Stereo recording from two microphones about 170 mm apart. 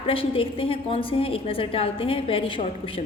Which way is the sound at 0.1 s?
30° left (ahead or behind).